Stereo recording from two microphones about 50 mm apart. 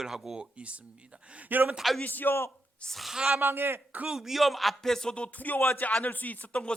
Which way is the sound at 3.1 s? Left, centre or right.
Centre.